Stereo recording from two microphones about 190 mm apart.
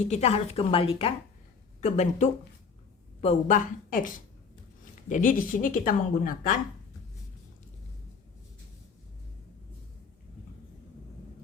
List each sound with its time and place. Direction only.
0.1 s a woman's voice: 35° left (ahead or behind)